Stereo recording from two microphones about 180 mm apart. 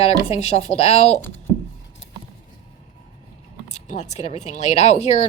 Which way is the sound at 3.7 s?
40° left (ahead or behind).